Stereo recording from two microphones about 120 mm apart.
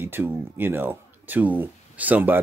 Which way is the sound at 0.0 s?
15° right (ahead or behind).